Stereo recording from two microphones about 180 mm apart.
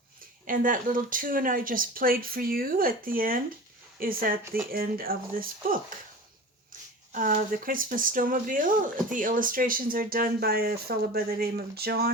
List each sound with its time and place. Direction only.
0.4 s speech: 50° right (ahead or behind)
7.1 s speech: 50° right (ahead or behind)